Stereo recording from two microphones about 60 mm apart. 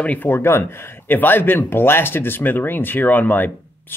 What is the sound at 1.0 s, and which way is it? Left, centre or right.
Speech, left.